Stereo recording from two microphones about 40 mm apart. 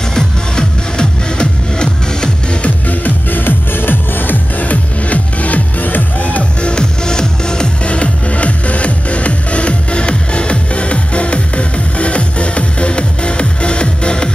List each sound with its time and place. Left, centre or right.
0.1 s music: centre
2.9 s music: left
4.6 s music: left
6.6 s music: left